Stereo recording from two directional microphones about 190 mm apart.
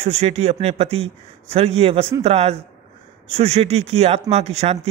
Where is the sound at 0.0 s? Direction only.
35° right (ahead or behind).